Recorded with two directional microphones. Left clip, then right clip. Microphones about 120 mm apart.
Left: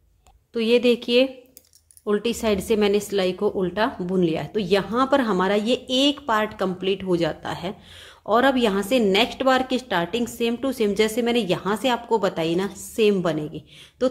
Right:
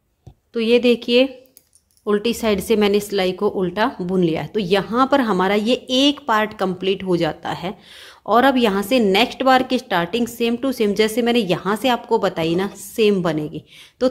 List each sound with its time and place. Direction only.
0.5 s a woman's voice: 20° right (ahead or behind)